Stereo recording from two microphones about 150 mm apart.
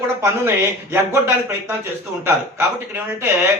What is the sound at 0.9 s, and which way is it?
Speech, 15° right (ahead or behind).